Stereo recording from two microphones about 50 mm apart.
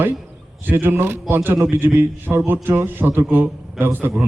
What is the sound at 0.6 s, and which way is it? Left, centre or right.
A man's voice, right.